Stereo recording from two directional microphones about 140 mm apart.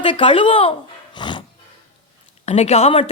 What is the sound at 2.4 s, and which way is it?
Speech, 50° left (ahead or behind).